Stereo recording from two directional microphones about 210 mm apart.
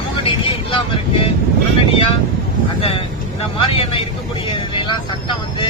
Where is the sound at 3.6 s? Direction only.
25° left (ahead or behind).